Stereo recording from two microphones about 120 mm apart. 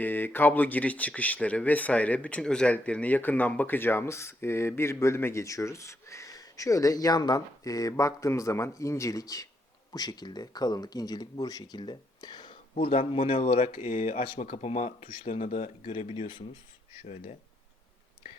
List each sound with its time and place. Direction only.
0.0 s speech: 15° left (ahead or behind); by 13.7 s 50° left (ahead or behind)
13.8 s speech: 90° left
14.3 s speech: 60° left (ahead or behind)
17.0 s speech: 65° left (ahead or behind)